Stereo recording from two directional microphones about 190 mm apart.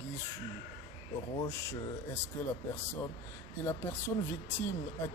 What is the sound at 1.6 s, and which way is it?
Speech, 15° left (ahead or behind).